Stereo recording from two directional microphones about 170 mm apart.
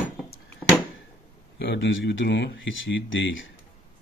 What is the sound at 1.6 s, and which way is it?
Speech, 90° left.